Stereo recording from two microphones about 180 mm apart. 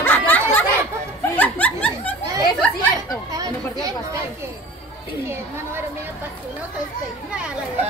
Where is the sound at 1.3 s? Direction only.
10° left (ahead or behind).